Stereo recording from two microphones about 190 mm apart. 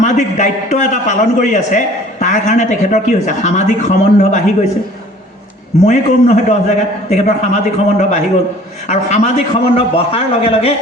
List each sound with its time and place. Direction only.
0.0 s a man's voice: 40° left (ahead or behind)
5.8 s a man's voice: 35° left (ahead or behind)